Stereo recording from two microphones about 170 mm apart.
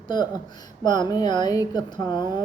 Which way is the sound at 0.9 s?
25° left (ahead or behind).